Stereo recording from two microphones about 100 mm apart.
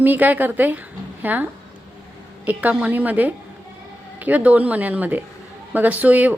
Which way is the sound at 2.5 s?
15° right (ahead or behind).